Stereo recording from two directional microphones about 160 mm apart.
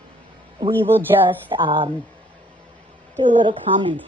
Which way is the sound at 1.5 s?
30° right (ahead or behind).